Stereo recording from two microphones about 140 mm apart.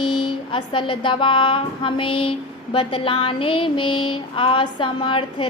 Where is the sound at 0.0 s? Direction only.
35° left (ahead or behind).